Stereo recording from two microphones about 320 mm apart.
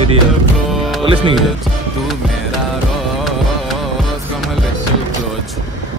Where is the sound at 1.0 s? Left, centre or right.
Centre.